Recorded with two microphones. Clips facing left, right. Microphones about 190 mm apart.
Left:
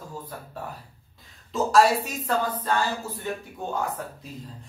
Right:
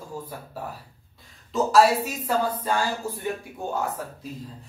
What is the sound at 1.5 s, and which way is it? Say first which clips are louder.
Speech: right 1 dB; centre (ahead or behind).